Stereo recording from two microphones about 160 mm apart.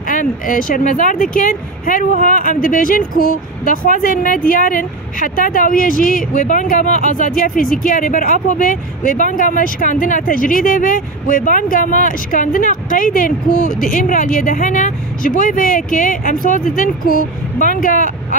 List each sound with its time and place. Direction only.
0.1 s speech: 60° left (ahead or behind)